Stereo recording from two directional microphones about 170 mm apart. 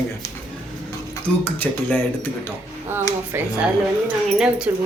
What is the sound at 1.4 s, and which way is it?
Speech, 10° left (ahead or behind).